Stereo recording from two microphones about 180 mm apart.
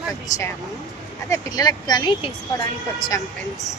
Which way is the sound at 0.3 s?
15° left (ahead or behind).